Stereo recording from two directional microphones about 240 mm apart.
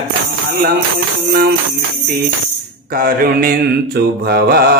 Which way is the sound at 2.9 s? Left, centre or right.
Right.